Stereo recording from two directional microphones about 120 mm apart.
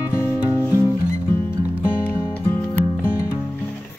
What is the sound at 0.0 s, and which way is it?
Music, 20° left (ahead or behind).